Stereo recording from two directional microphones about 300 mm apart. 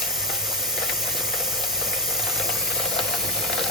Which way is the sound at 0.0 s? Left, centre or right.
Centre.